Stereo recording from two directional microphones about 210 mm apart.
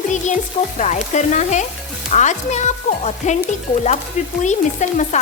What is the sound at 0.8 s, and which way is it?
Speech, 35° left (ahead or behind).